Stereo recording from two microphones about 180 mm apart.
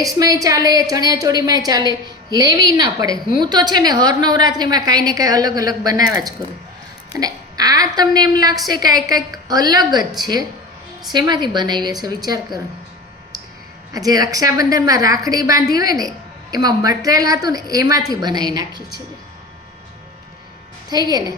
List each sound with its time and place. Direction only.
0.0 s a woman's voice: 20° right (ahead or behind)
13.9 s a woman's voice: 20° right (ahead or behind)
20.9 s a woman's voice: 20° right (ahead or behind)